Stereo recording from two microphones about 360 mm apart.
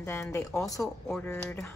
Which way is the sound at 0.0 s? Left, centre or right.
Centre.